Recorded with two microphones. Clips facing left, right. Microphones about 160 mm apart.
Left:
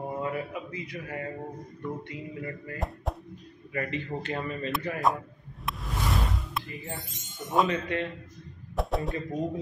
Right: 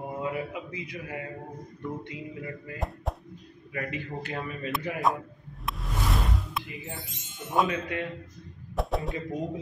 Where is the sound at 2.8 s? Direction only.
Centre (ahead or behind).